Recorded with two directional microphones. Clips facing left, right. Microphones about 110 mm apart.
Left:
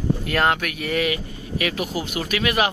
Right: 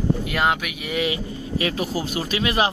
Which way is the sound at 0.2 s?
5° right (ahead or behind).